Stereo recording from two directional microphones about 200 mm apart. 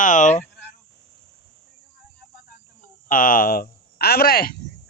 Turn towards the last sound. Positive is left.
turn(degrees=50)  # may be behind; listen again after turning